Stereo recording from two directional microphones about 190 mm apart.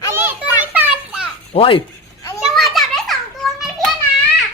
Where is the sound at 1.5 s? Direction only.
30° left (ahead or behind).